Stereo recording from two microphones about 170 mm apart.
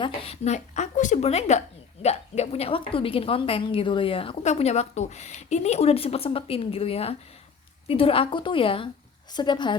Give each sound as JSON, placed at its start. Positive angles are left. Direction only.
{"t": 0.0, "sound": "a woman's voice", "side_deg": 35}